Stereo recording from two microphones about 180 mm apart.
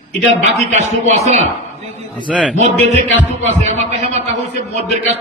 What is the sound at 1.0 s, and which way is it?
Speech, 35° right (ahead or behind).